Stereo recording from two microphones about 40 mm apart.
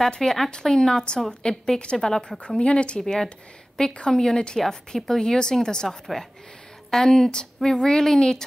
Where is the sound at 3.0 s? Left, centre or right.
Centre.